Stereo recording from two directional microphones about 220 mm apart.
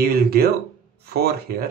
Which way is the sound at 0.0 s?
45° right (ahead or behind).